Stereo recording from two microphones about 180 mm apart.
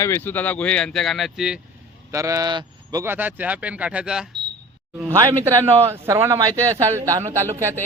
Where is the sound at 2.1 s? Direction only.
20° right (ahead or behind).